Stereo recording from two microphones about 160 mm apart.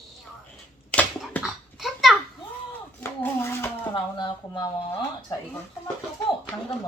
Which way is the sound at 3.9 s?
30° left (ahead or behind).